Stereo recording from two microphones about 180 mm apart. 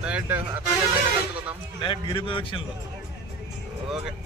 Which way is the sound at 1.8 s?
30° left (ahead or behind).